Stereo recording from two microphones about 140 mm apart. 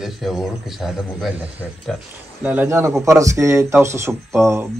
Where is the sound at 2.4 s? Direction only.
15° right (ahead or behind).